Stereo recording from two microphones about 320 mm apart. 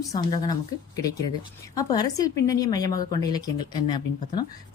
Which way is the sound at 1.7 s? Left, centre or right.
Centre.